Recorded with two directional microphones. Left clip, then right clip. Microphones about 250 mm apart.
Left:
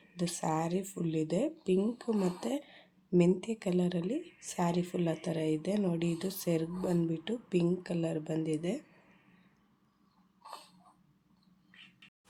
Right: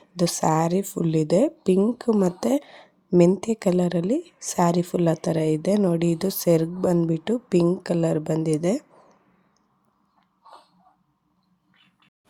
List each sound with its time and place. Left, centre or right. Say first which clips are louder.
0.2 s speech: right 12 dB; right